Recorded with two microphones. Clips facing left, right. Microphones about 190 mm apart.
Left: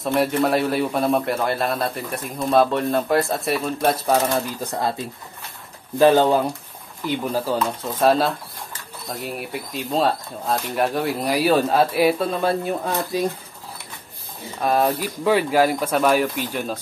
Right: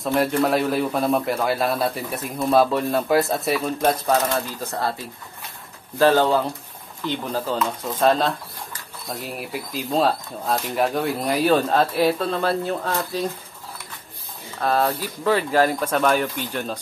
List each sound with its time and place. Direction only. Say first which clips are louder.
0.0 s speech: even; centre (ahead or behind)
4.3 s speech: left 2 dB; 20° left (ahead or behind)
14.6 s speech: left 2 dB; 15° left (ahead or behind)